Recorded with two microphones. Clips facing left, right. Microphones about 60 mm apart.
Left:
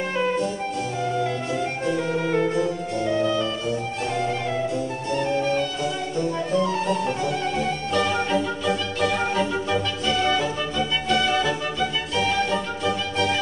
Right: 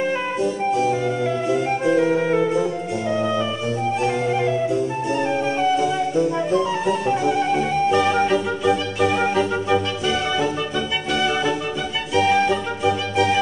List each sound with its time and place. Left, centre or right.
0.4 s music: centre
5.1 s music: centre